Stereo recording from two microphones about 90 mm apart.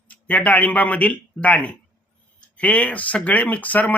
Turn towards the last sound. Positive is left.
turn(degrees=15)  # may be behind; listen again after turning